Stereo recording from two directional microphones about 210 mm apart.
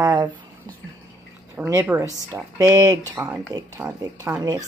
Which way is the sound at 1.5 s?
10° right (ahead or behind).